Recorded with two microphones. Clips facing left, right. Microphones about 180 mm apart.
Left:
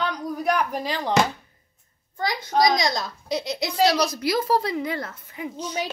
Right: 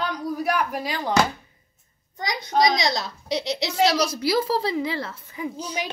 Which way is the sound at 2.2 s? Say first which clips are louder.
Even; 20° right (ahead or behind).